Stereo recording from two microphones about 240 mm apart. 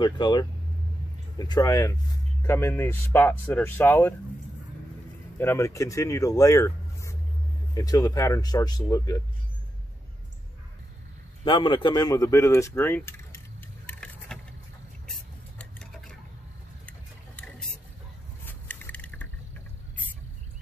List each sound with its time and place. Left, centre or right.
0.0 s speech: centre
5.4 s speech: centre
11.4 s speech: centre
13.8 s vehicle: centre
15.0 s a sound: centre
18.4 s scrape: centre